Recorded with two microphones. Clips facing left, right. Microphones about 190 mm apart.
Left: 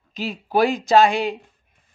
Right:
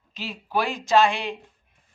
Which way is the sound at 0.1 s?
40° left (ahead or behind).